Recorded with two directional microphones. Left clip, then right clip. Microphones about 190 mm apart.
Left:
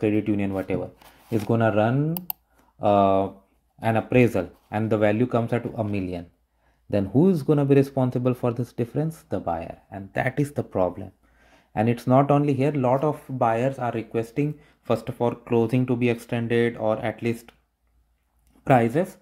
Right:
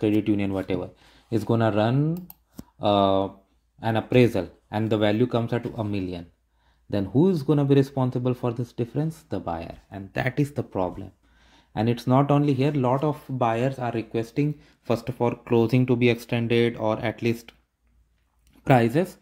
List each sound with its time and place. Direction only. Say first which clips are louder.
0.0 s speech: even; 10° right (ahead or behind)
18.6 s speech: left 1 dB; 15° right (ahead or behind)